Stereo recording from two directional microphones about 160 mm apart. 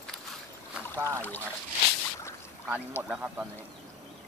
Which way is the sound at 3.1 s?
10° right (ahead or behind).